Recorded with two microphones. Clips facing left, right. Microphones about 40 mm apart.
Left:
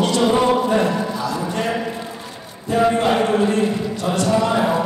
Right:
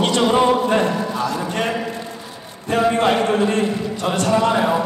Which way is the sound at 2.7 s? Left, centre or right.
Right.